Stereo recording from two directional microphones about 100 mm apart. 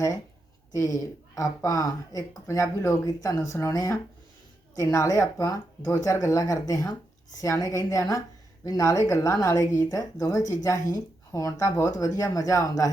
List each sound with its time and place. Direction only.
0.7 s speech: 30° left (ahead or behind)